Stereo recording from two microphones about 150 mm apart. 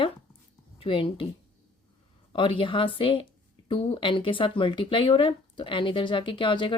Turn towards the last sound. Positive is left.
turn(degrees=35)  # may be behind; listen again after turning